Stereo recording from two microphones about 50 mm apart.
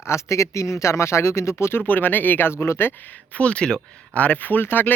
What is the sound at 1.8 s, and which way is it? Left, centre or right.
Speech, left.